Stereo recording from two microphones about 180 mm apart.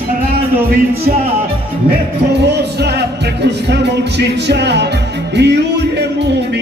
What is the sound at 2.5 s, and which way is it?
Music, 70° right (ahead or behind).